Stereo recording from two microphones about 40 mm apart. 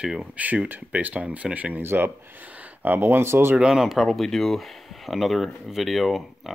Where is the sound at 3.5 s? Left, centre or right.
Centre.